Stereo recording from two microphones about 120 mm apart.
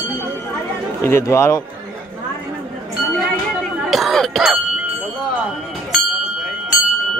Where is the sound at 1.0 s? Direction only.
25° left (ahead or behind).